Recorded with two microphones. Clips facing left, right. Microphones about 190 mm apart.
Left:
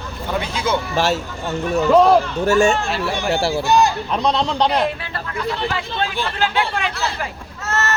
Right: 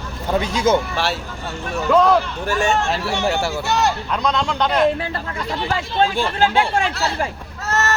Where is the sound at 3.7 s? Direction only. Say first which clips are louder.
Left 4 dB; 70° right (ahead or behind).